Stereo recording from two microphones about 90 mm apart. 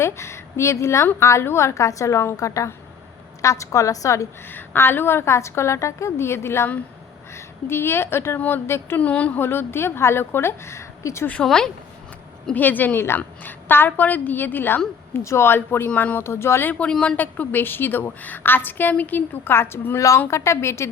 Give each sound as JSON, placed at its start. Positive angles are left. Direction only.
{"t": 0.0, "sound": "a woman's voice", "side_deg": 30}
{"t": 4.4, "sound": "a woman's voice", "side_deg": 25}
{"t": 9.0, "sound": "a woman's voice", "side_deg": 15}
{"t": 11.4, "sound": "speech", "side_deg": 5}
{"t": 12.5, "sound": "a woman's voice", "side_deg": 20}
{"t": 16.7, "sound": "a woman's voice", "side_deg": 15}